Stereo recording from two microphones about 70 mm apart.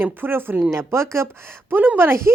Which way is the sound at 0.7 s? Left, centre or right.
Right.